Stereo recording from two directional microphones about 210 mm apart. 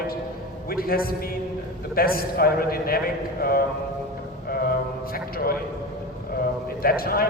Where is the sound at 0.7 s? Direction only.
45° left (ahead or behind).